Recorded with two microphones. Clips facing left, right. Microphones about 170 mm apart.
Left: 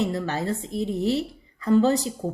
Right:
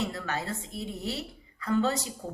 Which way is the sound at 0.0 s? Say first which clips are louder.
Left 7 dB; 35° left (ahead or behind).